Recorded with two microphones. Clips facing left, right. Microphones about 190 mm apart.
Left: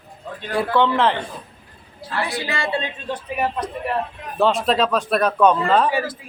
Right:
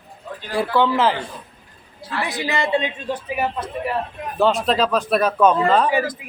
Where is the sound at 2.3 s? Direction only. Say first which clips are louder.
Right 6 dB; 20° right (ahead or behind).